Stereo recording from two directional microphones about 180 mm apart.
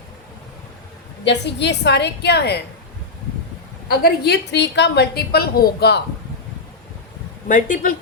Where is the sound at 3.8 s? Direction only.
65° left (ahead or behind).